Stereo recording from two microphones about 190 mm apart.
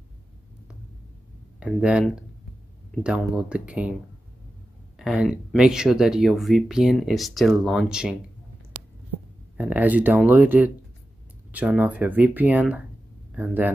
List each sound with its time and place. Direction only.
1.6 s speech: 5° right (ahead or behind)
9.6 s speech: 10° right (ahead or behind)